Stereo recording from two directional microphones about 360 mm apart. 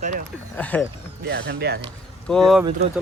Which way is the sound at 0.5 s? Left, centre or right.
Centre.